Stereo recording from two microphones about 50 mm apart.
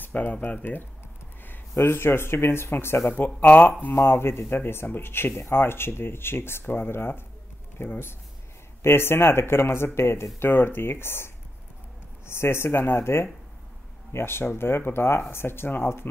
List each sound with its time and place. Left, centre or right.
0.0 s speech: left
1.8 s speech: left
3.3 s speech: left
3.9 s speech: left